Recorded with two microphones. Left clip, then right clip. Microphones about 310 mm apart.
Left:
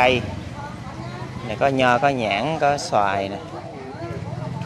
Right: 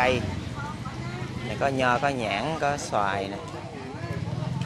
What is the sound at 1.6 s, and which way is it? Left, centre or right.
Speech, left.